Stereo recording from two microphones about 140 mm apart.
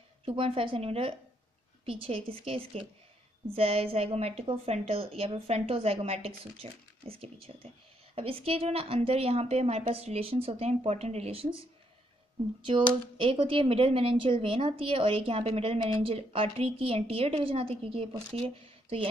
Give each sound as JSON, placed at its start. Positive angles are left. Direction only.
{"t": 0.2, "sound": "a woman's voice", "side_deg": -40}
{"t": 12.7, "sound": "speech", "side_deg": -35}